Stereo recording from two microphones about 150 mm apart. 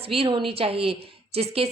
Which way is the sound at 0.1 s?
35° right (ahead or behind).